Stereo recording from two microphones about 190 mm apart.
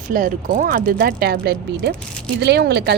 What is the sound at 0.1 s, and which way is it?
Speech, 45° right (ahead or behind).